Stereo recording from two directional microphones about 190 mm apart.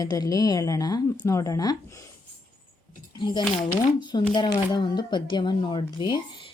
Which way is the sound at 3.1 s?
25° left (ahead or behind).